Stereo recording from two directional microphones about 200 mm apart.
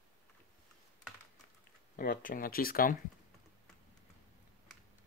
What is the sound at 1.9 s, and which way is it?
Speech, 45° left (ahead or behind).